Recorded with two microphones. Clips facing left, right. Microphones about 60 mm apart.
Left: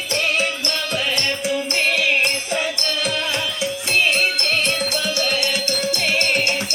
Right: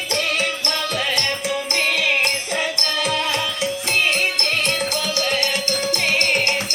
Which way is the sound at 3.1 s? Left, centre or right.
Right.